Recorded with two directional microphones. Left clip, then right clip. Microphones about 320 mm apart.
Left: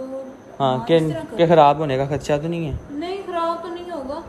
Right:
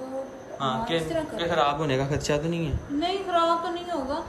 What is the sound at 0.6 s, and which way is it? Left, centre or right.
A man's voice, centre.